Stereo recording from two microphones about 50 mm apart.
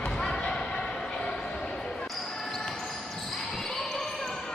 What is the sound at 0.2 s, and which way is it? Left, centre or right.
Basketball bounce, centre.